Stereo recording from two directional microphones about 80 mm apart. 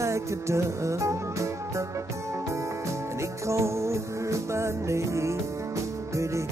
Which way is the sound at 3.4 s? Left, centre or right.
Right.